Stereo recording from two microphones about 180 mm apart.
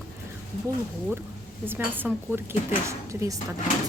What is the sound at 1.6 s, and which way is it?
Speech, 10° right (ahead or behind).